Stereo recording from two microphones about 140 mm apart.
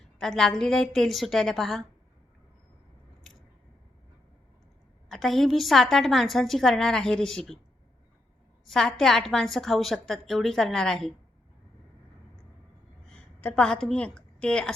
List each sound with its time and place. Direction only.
0.0 s a sound: 5° left (ahead or behind)
0.6 s a woman's voice: 5° left (ahead or behind)
5.0 s a woman's voice: centre (ahead or behind)
8.6 s a woman's voice: centre (ahead or behind)
13.1 s a woman's voice: 5° left (ahead or behind)